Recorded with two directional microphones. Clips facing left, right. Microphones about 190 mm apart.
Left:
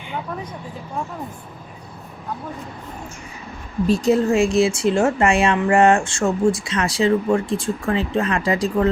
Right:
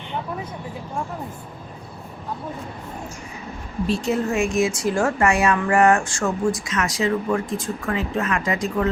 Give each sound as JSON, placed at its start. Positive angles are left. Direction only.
{"t": 3.8, "sound": "speech", "side_deg": 40}